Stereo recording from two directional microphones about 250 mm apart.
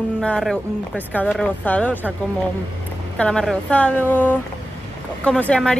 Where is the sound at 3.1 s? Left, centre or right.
Centre.